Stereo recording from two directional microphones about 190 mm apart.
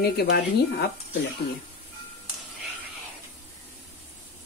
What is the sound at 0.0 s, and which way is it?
Speech, 55° left (ahead or behind).